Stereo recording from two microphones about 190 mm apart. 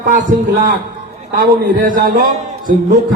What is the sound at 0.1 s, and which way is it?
A man's voice, 40° right (ahead or behind).